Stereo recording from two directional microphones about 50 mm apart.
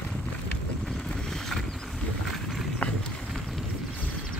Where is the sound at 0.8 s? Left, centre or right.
Centre.